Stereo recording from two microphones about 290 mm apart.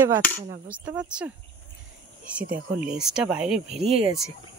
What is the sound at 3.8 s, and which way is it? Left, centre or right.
Speech, right.